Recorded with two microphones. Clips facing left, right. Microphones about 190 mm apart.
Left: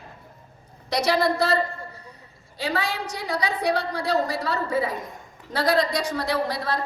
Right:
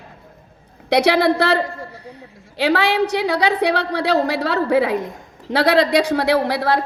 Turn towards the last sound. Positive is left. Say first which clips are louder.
# right 8 dB
turn(degrees=-70)  # may be behind; listen again after turning